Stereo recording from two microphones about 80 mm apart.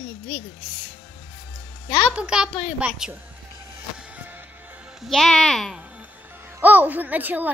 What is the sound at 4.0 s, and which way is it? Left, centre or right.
Music, centre.